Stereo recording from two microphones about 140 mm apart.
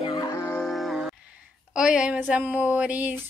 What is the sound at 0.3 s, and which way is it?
Music, 15° left (ahead or behind).